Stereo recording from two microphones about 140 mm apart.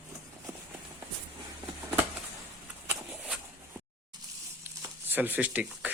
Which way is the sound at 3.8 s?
15° right (ahead or behind).